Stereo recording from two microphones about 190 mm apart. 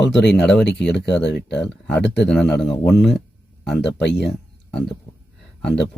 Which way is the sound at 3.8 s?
65° left (ahead or behind).